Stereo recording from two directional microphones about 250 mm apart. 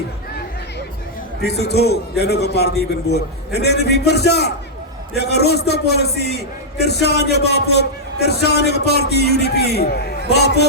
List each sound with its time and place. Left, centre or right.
1.4 s a man's voice: left